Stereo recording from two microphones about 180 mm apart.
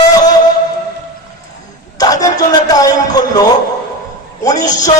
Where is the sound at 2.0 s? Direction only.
20° left (ahead or behind).